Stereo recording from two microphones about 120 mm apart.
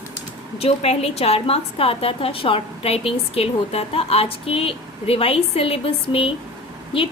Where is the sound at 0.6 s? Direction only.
60° left (ahead or behind).